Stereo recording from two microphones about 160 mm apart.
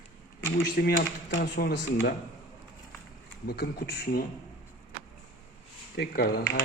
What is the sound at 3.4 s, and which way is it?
Speech, 75° left (ahead or behind).